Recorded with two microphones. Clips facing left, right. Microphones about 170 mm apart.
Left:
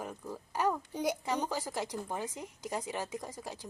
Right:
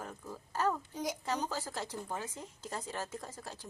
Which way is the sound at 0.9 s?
65° left (ahead or behind).